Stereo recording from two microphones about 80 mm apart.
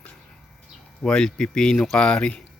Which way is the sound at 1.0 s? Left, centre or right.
Centre.